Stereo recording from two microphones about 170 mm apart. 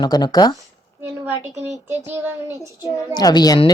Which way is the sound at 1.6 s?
40° right (ahead or behind).